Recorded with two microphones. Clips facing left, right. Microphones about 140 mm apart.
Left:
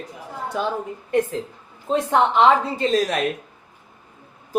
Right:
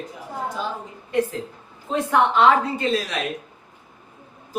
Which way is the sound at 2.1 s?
20° left (ahead or behind).